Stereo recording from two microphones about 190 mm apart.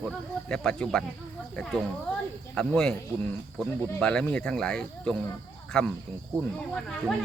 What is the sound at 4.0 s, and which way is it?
Speech, 5° left (ahead or behind).